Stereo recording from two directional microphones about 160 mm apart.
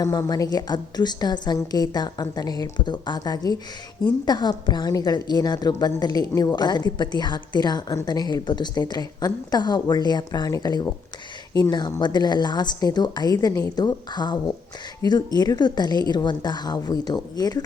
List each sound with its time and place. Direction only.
0.0 s a woman's voice: 20° left (ahead or behind)